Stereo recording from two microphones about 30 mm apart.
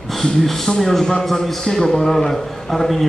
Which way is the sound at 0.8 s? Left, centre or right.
Centre.